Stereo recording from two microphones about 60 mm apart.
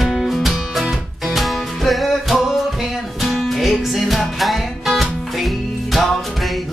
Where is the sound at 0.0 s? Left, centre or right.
Centre.